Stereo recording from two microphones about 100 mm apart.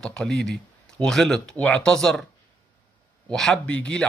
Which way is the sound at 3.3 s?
5° left (ahead or behind).